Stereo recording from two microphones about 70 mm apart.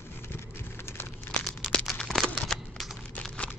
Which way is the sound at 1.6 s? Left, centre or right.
Centre.